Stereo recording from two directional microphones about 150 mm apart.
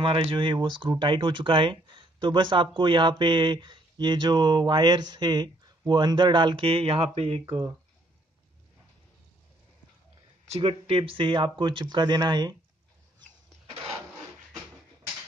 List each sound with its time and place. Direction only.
0.0 s speech: 35° right (ahead or behind)
10.5 s speech: 40° right (ahead or behind)